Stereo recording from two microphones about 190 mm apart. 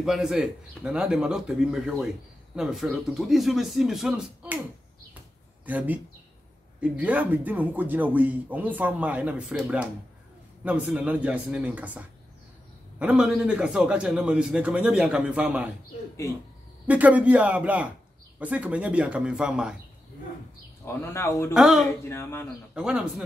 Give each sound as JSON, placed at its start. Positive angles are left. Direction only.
{"t": 0.0, "sound": "a man's voice", "side_deg": -5}
{"t": 5.7, "sound": "speech", "side_deg": -10}
{"t": 13.0, "sound": "a man's voice", "side_deg": -5}
{"t": 16.8, "sound": "speech", "side_deg": -10}
{"t": 20.8, "sound": "speech", "side_deg": 15}
{"t": 21.5, "sound": "a man's voice", "side_deg": 0}
{"t": 22.0, "sound": "speech", "side_deg": 15}
{"t": 22.8, "sound": "a man's voice", "side_deg": -5}